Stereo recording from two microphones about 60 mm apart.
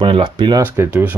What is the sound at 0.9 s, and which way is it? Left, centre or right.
Speech, right.